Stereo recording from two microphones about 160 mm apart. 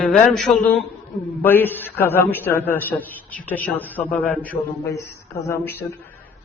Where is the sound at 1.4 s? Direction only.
10° left (ahead or behind).